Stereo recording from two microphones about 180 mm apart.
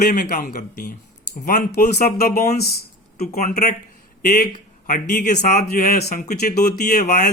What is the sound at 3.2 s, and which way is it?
Speech, 40° left (ahead or behind).